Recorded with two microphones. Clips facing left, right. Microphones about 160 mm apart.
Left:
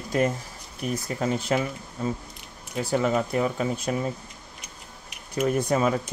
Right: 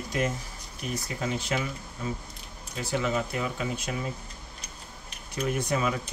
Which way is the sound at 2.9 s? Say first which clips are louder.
Left 5 dB; 45° left (ahead or behind).